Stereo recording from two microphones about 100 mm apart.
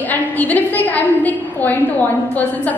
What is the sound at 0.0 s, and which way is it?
A woman's voice, 15° left (ahead or behind).